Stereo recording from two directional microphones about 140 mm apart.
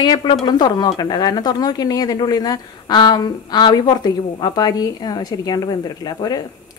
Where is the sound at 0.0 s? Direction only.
30° left (ahead or behind).